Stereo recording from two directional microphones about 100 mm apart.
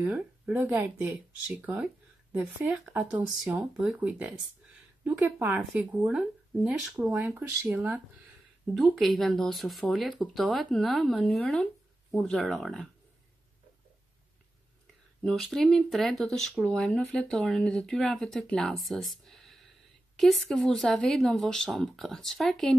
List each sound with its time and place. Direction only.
0.5 s speech: 20° right (ahead or behind)
2.9 s speech: 15° right (ahead or behind)
6.0 s speech: 5° right (ahead or behind)
8.7 s speech: centre (ahead or behind)
15.2 s speech: 5° left (ahead or behind)